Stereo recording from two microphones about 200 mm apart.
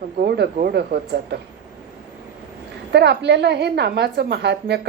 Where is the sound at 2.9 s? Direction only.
55° right (ahead or behind).